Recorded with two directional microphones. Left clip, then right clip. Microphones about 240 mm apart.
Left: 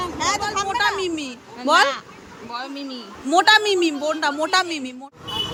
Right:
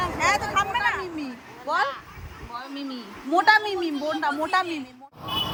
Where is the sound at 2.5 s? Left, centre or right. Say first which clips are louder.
Left 4 dB; left.